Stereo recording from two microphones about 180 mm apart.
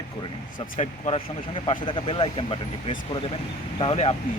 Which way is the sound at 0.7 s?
35° left (ahead or behind).